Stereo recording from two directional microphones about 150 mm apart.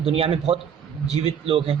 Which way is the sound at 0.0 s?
40° right (ahead or behind).